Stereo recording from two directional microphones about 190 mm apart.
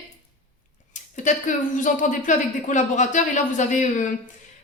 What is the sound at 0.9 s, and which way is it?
Speech, 40° left (ahead or behind).